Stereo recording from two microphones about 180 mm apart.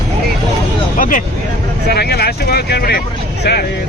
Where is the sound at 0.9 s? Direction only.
50° left (ahead or behind).